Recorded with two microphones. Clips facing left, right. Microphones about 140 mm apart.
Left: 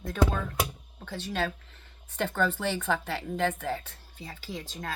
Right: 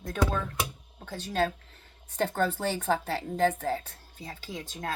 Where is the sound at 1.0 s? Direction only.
45° right (ahead or behind).